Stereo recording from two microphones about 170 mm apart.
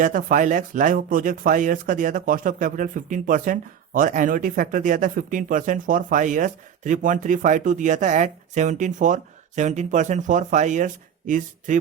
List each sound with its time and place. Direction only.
0.0 s speech: 50° right (ahead or behind)